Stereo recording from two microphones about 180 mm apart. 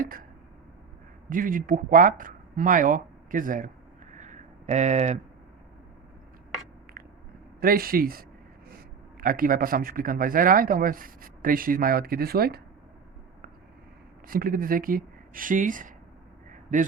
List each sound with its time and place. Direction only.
0.0 s a sound: 50° right (ahead or behind)
1.3 s speech: 50° right (ahead or behind)
4.1 s a sound: 45° right (ahead or behind)
7.6 s speech: 55° right (ahead or behind)
9.2 s speech: 50° right (ahead or behind)
14.3 s speech: 50° right (ahead or behind)